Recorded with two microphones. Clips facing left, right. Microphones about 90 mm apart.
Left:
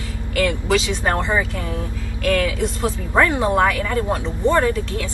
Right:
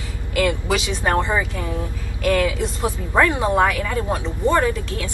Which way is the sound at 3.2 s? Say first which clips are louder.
Even; 10° right (ahead or behind).